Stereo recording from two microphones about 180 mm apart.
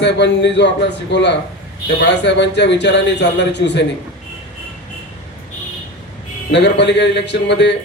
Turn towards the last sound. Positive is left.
turn(degrees=75)  # may be behind; listen again after turning